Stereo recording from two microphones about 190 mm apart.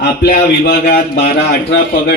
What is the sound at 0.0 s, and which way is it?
A man's voice, 55° left (ahead or behind).